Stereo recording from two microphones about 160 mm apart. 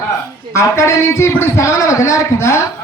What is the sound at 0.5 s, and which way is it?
A man's voice, 20° left (ahead or behind).